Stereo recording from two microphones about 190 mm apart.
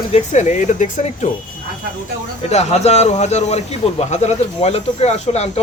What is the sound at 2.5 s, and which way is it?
A man's voice, 35° left (ahead or behind).